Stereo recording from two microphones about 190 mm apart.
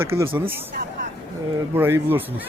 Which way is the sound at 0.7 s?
45° right (ahead or behind).